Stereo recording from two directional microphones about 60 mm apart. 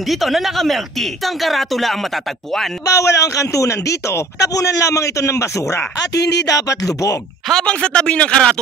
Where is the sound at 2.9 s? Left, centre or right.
Left.